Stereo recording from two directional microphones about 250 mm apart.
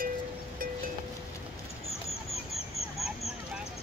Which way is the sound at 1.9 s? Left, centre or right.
Left.